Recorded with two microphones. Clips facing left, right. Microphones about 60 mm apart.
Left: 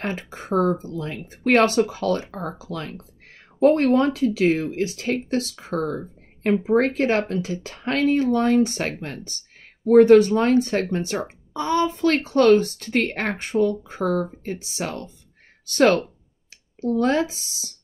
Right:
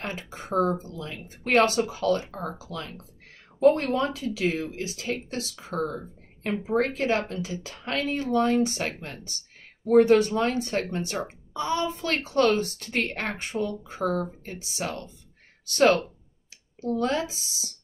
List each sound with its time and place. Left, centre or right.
0.0 s a woman's voice: left